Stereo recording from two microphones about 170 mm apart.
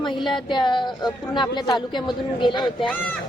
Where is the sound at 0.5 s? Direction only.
25° left (ahead or behind).